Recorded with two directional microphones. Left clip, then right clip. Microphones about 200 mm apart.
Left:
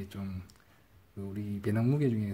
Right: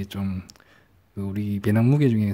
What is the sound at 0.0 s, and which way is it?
Speech, 40° right (ahead or behind).